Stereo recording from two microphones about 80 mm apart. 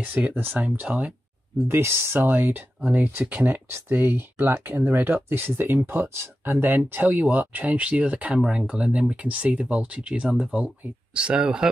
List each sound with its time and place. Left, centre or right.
0.0 s speech: right
1.7 s speech: right; by 11.7 s centre